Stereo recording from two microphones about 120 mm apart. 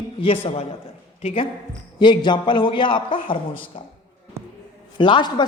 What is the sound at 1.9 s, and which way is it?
A woman's voice, 40° left (ahead or behind).